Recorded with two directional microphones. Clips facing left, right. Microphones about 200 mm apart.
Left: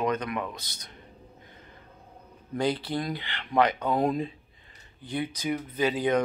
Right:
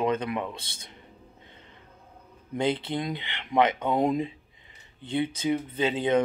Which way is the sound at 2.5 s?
20° right (ahead or behind).